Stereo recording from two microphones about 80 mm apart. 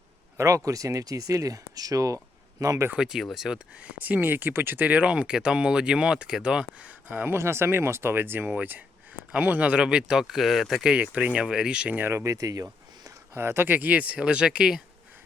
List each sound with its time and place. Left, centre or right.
0.3 s speech: right
2.9 s speech: centre
3.8 s speech: right
7.3 s speech: right; by 10.9 s centre
10.9 s speech: centre
12.0 s speech: right
13.3 s speech: right; by 14.8 s centre